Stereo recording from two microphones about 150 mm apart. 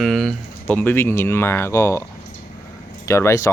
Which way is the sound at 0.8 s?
15° left (ahead or behind).